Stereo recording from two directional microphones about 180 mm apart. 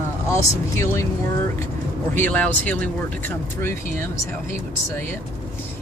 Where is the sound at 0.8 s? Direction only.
15° left (ahead or behind).